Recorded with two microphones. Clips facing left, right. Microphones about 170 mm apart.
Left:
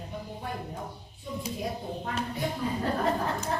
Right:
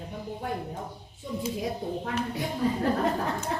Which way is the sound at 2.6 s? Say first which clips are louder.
Right 7 dB; 80° right.